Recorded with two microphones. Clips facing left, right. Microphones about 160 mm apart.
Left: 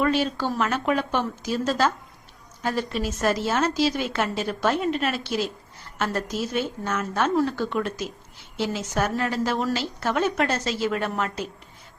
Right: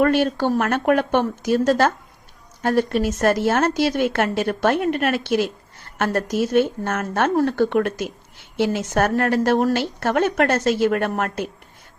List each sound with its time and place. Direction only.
0.0 s a woman's voice: 55° right (ahead or behind)